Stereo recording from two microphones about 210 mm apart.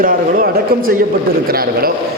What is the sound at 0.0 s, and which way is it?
A man's voice, 40° right (ahead or behind).